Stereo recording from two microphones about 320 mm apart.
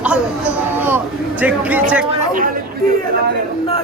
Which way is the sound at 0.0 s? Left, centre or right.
Centre.